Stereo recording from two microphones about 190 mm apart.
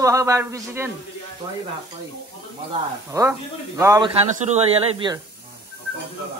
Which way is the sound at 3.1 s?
15° right (ahead or behind).